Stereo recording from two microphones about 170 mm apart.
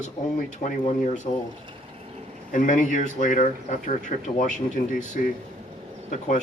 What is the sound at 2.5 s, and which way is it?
A man's voice, 50° left (ahead or behind).